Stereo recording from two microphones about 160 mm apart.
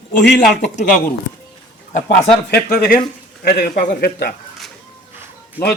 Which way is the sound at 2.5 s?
70° left (ahead or behind).